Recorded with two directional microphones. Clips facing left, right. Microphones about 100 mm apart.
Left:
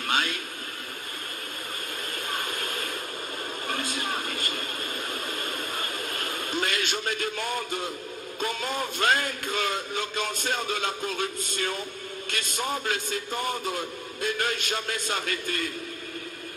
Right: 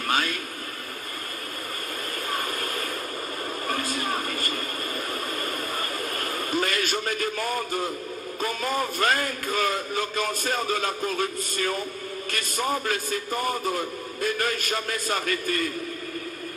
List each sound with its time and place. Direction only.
0.0 s radio: 45° right (ahead or behind)
2.3 s a sound: 40° right (ahead or behind)
3.6 s speech: 40° right (ahead or behind)
5.4 s radio: 40° right (ahead or behind)
8.5 s a man's voice: 40° right (ahead or behind)